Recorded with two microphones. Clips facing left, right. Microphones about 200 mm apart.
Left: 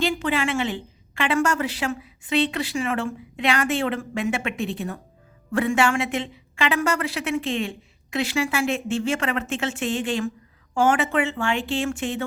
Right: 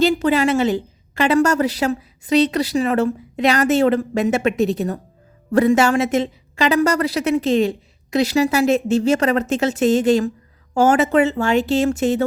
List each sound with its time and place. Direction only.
0.0 s a woman's voice: 40° right (ahead or behind)